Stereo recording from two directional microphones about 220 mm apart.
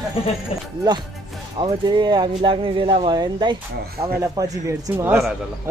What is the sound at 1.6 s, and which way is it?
Speech, 20° right (ahead or behind).